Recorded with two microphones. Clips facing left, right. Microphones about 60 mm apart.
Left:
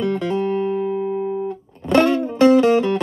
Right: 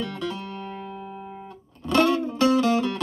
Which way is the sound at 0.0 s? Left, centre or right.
Left.